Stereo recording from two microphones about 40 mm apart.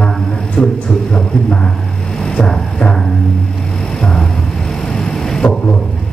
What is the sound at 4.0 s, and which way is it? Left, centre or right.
Music, centre.